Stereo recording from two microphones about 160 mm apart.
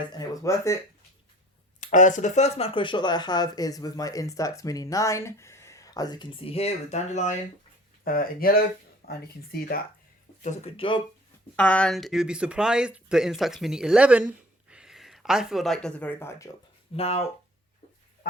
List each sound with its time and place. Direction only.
0.2 s speech: 20° left (ahead or behind)
1.8 s speech: 50° left (ahead or behind)
8.0 s speech: 65° left (ahead or behind)
10.4 s speech: 40° left (ahead or behind)
11.5 s speech: 10° left (ahead or behind)
16.9 s speech: 40° left (ahead or behind)